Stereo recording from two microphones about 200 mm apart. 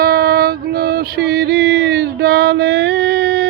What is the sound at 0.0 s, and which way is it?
Music, 50° right (ahead or behind).